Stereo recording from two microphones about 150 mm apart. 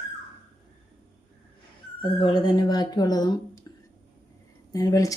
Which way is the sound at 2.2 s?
30° left (ahead or behind).